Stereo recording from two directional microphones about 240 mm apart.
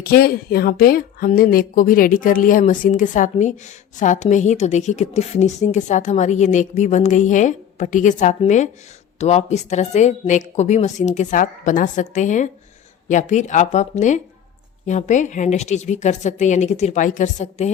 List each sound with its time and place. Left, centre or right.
0.0 s a woman's voice: left